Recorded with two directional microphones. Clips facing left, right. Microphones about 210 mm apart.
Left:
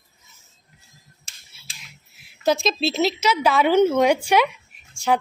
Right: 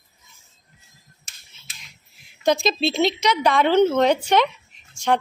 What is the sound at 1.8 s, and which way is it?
Speech, 5° left (ahead or behind).